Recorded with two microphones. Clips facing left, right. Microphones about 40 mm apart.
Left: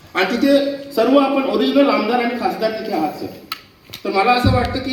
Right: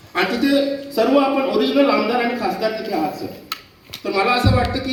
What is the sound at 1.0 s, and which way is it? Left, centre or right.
A man's voice, centre.